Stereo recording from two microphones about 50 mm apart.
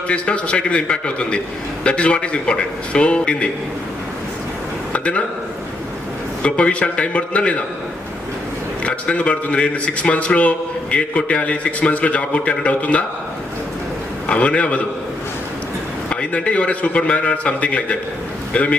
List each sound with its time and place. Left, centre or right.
0.1 s a man's voice: left
4.9 s speech: left
6.4 s a man's voice: left
8.8 s a man's voice: left
14.3 s a man's voice: left
16.0 s a man's voice: left